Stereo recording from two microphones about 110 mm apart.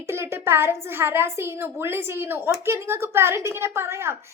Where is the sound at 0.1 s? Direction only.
20° right (ahead or behind).